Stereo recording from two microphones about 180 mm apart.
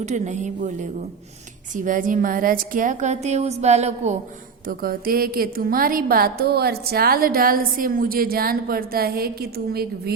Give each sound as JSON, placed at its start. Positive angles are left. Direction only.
{"t": 0.0, "sound": "a woman's voice", "side_deg": -40}
{"t": 4.6, "sound": "a woman's voice", "side_deg": -55}